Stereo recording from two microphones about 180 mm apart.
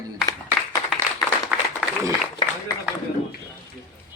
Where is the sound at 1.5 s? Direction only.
5° right (ahead or behind).